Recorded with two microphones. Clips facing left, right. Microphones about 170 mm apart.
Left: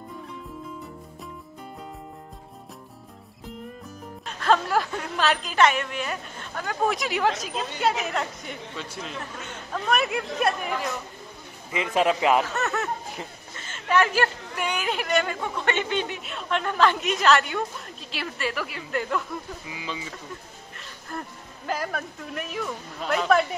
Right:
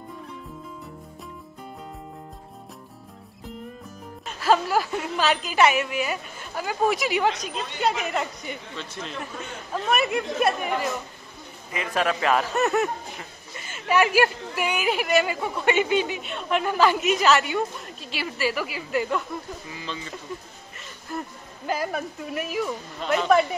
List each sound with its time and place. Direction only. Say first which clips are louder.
4.4 s a woman's voice: right 1 dB; 5° right (ahead or behind)
8.7 s a woman's voice: right 1 dB; 10° left (ahead or behind)
11.7 s a man's voice: left 3 dB; 20° left (ahead or behind)
12.5 s speech: right 5 dB; 15° right (ahead or behind)
19.7 s speech: left 1 dB; 10° left (ahead or behind)
20.7 s speech: right 3 dB; 5° right (ahead or behind)